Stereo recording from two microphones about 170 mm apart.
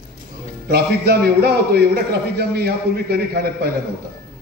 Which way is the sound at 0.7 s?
70° right (ahead or behind).